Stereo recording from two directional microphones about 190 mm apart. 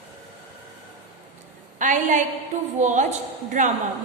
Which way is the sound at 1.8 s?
40° right (ahead or behind).